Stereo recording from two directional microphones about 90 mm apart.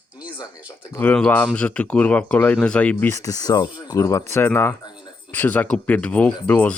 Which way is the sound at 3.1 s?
40° left (ahead or behind).